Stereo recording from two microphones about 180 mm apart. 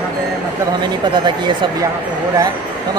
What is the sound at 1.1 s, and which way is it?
Speech, 25° right (ahead or behind).